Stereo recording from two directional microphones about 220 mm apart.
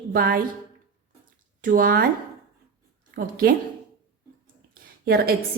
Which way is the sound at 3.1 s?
45° right (ahead or behind).